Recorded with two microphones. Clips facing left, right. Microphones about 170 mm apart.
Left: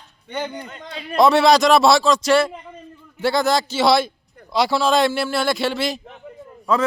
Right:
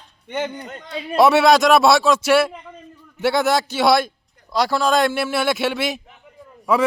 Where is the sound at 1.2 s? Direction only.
5° right (ahead or behind).